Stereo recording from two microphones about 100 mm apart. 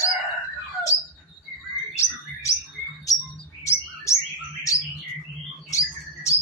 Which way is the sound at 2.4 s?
35° left (ahead or behind).